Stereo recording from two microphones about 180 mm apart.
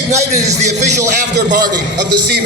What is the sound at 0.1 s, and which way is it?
Speech, 40° right (ahead or behind).